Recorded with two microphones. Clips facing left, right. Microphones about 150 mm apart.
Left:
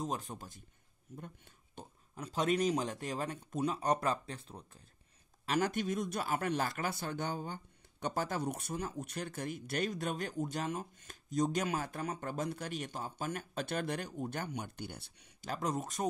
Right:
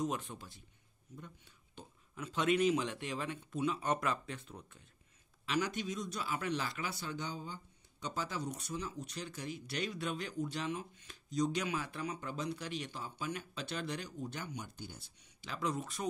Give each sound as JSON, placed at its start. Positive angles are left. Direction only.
{"t": 0.0, "sound": "speech", "side_deg": 40}
{"t": 2.1, "sound": "speech", "side_deg": 35}
{"t": 5.4, "sound": "speech", "side_deg": 50}
{"t": 15.4, "sound": "speech", "side_deg": 45}